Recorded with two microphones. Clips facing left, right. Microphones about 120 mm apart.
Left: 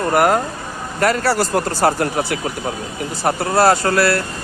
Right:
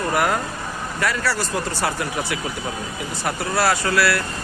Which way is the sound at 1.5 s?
50° left (ahead or behind).